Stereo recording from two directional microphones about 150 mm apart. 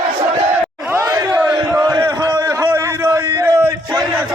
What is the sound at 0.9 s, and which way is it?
Chatter, 20° right (ahead or behind).